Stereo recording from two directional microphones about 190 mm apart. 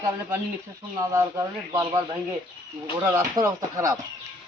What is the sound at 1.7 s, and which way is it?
Speech, 20° right (ahead or behind).